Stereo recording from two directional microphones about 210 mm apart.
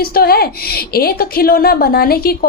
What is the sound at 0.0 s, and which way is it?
A woman's voice, 45° left (ahead or behind).